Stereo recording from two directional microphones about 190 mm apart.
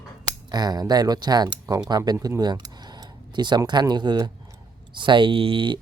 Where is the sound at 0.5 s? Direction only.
20° right (ahead or behind).